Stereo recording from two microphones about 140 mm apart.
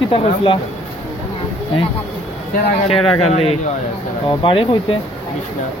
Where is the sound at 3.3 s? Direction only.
45° left (ahead or behind).